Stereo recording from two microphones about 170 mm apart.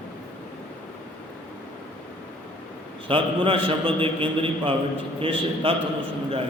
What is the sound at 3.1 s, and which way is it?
A man's voice, 30° right (ahead or behind).